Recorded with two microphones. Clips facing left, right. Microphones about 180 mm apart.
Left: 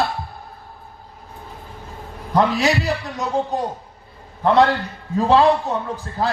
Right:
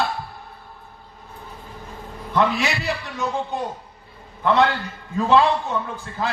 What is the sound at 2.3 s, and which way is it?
A man's voice, 40° left (ahead or behind).